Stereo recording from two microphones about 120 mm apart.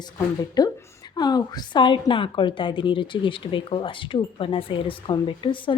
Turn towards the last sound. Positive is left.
turn(degrees=45)  # may be behind; listen again after turning